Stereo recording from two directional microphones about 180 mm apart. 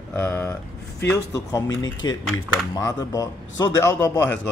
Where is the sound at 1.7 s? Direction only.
90° left.